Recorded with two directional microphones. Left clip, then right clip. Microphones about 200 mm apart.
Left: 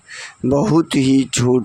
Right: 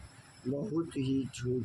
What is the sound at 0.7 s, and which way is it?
Speech, 60° left (ahead or behind).